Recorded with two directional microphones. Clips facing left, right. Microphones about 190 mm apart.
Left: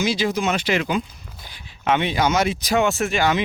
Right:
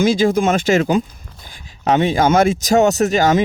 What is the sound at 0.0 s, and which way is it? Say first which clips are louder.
Speech: right 7 dB; 50° right (ahead or behind).